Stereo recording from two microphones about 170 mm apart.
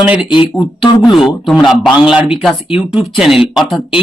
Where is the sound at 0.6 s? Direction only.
25° left (ahead or behind).